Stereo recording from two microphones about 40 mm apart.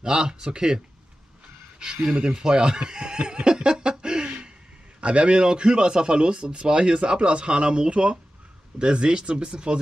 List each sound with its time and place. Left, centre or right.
0.0 s a man's voice: right
2.2 s a man's voice: centre
3.9 s a sound: right
5.0 s a man's voice: right